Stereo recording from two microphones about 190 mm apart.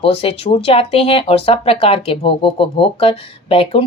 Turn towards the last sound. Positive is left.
turn(degrees=30)  # may be behind; listen again after turning